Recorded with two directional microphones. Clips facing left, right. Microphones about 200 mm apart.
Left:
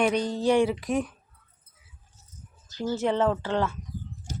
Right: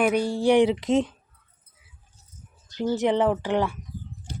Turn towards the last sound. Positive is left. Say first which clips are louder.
# right 2 dB
turn(degrees=-15)  # may be behind; listen again after turning